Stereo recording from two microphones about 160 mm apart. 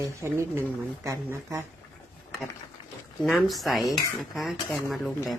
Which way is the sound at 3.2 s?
Centre (ahead or behind).